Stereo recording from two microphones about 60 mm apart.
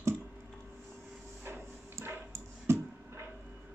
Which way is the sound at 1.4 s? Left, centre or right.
Right.